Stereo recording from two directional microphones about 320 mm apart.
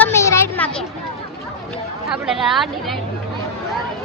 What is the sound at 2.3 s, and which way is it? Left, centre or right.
Speech, centre.